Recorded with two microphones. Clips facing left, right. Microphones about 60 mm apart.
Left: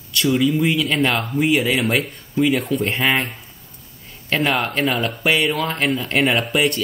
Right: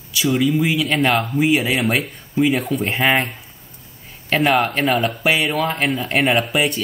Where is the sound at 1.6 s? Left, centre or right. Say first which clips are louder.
Even; centre.